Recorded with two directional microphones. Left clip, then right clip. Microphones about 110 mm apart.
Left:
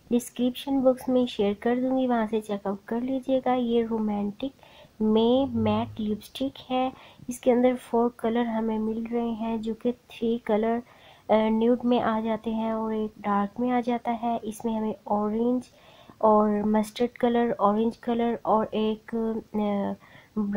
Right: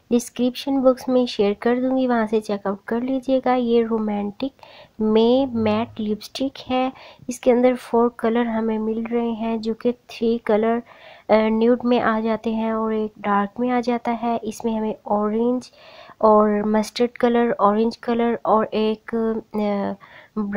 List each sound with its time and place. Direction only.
0.1 s speech: 35° right (ahead or behind)
15.0 s speech: 45° right (ahead or behind)
15.3 s speech: 30° right (ahead or behind)
16.2 s speech: 40° right (ahead or behind)